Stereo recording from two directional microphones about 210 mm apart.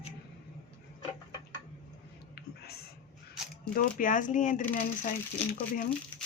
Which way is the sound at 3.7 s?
40° left (ahead or behind).